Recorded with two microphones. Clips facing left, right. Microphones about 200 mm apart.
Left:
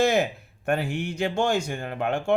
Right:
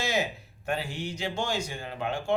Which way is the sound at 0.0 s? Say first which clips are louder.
Left 8 dB; 55° left (ahead or behind).